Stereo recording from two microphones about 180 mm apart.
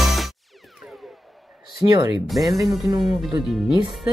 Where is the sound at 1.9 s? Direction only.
20° right (ahead or behind).